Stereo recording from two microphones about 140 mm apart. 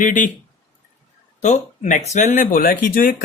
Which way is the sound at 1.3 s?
55° left (ahead or behind).